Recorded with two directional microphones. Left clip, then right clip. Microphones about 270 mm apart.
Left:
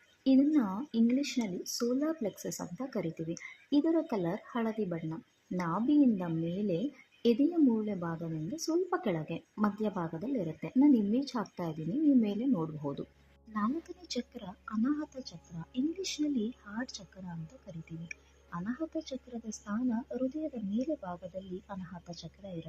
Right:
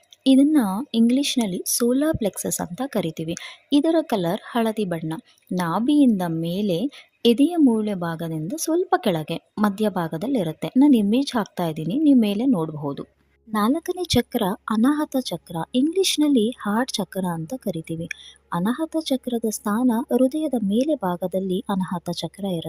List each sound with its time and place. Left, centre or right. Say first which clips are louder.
0.3 s speech: right 10 dB; right
7.9 s speech: right 10 dB; right